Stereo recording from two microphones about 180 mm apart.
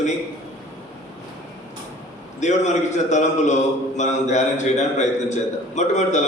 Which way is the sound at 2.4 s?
40° left (ahead or behind).